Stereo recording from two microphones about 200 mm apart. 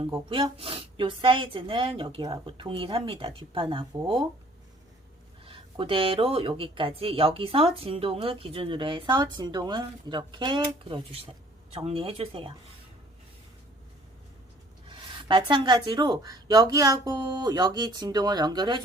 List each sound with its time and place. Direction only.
0.0 s speech: 25° right (ahead or behind)
5.5 s speech: 25° right (ahead or behind)
15.2 s speech: 25° right (ahead or behind)